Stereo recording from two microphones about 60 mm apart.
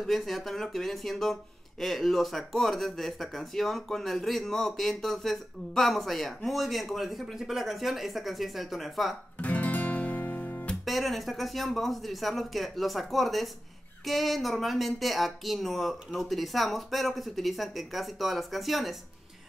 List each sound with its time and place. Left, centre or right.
0.0 s speech: centre
9.4 s music: left
10.7 s speech: centre